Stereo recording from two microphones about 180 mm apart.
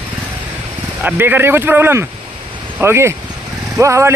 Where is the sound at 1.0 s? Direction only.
10° right (ahead or behind).